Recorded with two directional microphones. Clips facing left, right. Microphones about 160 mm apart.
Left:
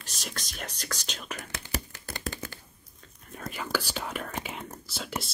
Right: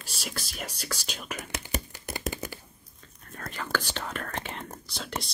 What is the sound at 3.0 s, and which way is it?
Whispering, 10° left (ahead or behind).